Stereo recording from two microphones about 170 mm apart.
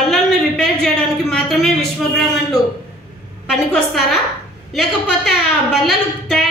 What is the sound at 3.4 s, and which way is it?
Speech, centre (ahead or behind).